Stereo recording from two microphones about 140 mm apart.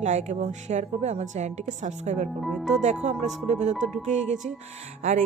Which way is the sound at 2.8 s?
55° right (ahead or behind).